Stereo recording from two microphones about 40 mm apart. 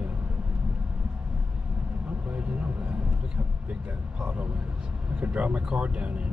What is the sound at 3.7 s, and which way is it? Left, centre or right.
Speech, right.